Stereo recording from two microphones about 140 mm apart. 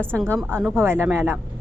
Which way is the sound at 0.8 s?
15° right (ahead or behind).